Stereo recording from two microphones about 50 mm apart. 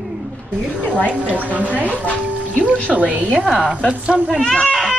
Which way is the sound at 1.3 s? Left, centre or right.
Right.